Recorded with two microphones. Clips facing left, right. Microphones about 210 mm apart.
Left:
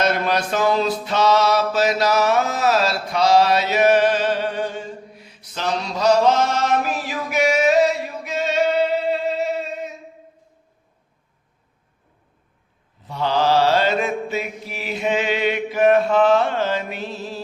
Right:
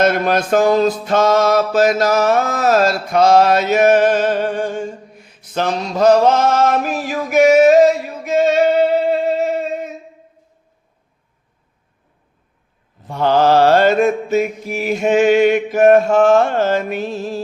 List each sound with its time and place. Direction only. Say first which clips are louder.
0.0 s mantra: right 5 dB; 50° right (ahead or behind)
9.0 s a sound: right 5 dB; 50° right (ahead or behind)
13.1 s mantra: right 6 dB; 50° right (ahead or behind)